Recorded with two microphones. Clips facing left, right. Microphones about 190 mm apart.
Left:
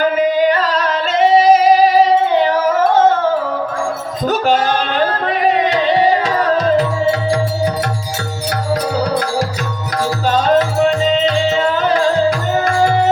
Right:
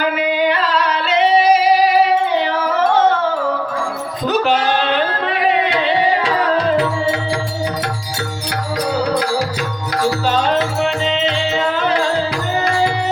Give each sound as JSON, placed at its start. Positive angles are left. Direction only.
{"t": 0.0, "sound": "yodeling", "side_deg": 45}
{"t": 2.5, "sound": "a sound", "side_deg": 45}
{"t": 4.3, "sound": "music", "side_deg": 45}
{"t": 10.2, "sound": "music", "side_deg": 45}